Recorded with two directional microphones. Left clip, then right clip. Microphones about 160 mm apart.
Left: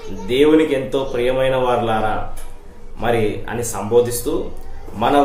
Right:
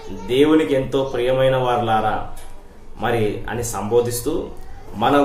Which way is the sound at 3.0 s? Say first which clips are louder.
Left 2 dB; 10° right (ahead or behind).